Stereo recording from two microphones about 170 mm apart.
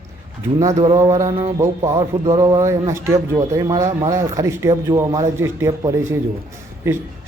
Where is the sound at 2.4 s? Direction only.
20° right (ahead or behind).